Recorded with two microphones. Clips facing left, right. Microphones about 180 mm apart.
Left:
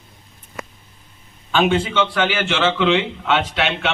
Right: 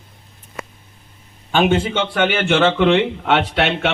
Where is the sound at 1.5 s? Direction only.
45° right (ahead or behind).